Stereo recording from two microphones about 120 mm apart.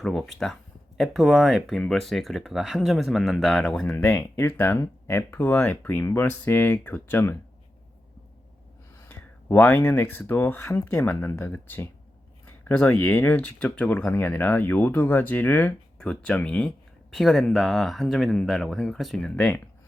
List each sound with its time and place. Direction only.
0.0 s speech: centre (ahead or behind)
3.9 s speech: 20° left (ahead or behind)
9.0 s speech: 15° left (ahead or behind)